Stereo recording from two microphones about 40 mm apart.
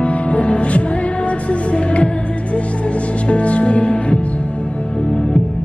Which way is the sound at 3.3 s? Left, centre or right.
Left.